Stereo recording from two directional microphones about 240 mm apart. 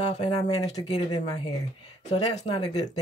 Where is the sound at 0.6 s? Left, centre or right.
Centre.